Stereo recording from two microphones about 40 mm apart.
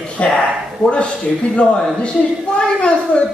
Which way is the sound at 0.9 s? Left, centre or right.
Left.